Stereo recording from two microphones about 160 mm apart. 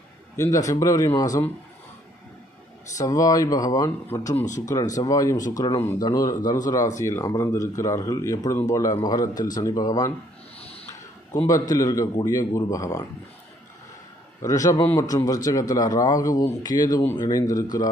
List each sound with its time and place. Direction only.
0.4 s speech: 20° left (ahead or behind)
3.0 s speech: 20° left (ahead or behind)
5.8 s speech: 15° left (ahead or behind)
11.7 s speech: 20° left (ahead or behind)
14.4 s speech: 20° left (ahead or behind)